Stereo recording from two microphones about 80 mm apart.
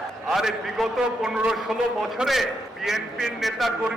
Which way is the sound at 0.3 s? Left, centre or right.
Centre.